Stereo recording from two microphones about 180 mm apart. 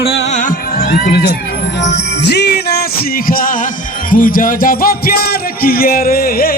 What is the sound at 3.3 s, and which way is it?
Music, 50° left (ahead or behind).